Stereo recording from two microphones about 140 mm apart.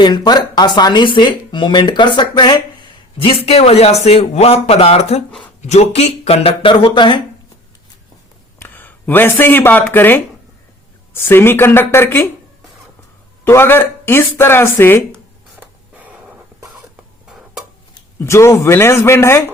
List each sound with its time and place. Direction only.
0.0 s speech: 30° left (ahead or behind)
8.5 s speech: 15° left (ahead or behind)
13.4 s speech: 15° left (ahead or behind)
15.6 s a sound: 10° right (ahead or behind)
18.2 s speech: 20° left (ahead or behind)